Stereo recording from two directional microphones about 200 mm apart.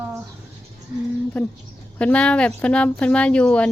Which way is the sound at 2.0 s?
5° left (ahead or behind).